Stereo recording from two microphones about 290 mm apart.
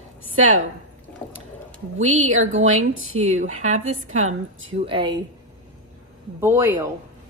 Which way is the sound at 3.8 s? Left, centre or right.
Right.